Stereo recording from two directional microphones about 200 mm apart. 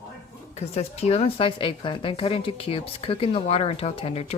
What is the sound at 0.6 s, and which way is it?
Speech, 30° left (ahead or behind).